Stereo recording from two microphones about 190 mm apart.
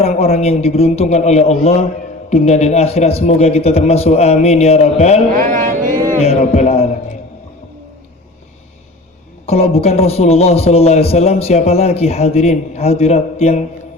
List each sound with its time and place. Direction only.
0.0 s a man's voice: 35° left (ahead or behind)
5.3 s a sound: 45° right (ahead or behind)
6.2 s a man's voice: 35° left (ahead or behind)
9.5 s a man's voice: 35° left (ahead or behind)